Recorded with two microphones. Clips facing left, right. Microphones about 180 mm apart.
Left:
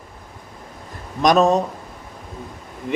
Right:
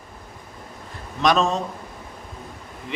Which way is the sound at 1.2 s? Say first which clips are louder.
Left 5 dB; 40° left (ahead or behind).